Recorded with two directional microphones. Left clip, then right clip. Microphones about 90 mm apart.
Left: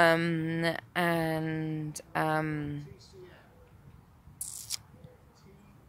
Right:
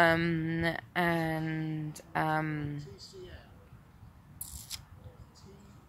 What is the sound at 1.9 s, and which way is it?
Speech, 35° left (ahead or behind).